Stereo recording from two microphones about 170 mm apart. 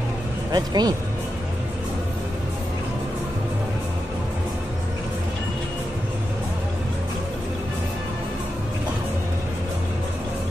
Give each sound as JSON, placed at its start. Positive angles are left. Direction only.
{"t": 0.5, "sound": "speech", "side_deg": -25}